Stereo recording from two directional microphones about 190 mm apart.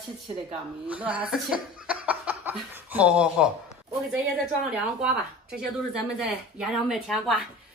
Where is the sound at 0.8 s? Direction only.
5° right (ahead or behind).